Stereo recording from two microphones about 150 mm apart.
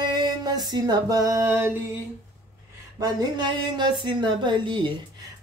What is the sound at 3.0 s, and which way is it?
Speech, 25° right (ahead or behind).